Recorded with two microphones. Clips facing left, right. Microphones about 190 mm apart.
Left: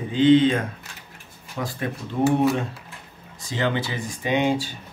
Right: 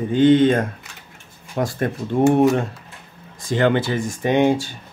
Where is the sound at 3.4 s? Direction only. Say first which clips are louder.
Right 7 dB; 55° right (ahead or behind).